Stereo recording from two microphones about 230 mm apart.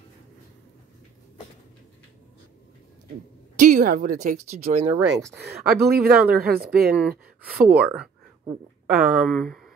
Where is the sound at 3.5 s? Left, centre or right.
Right.